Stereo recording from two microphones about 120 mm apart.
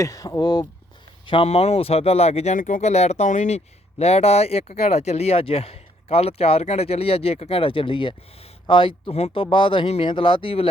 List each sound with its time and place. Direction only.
0.0 s speech: 30° left (ahead or behind)
1.3 s speech: 50° left (ahead or behind)